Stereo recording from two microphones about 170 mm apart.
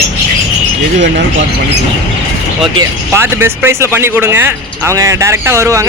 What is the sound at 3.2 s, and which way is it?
Speech, 15° right (ahead or behind).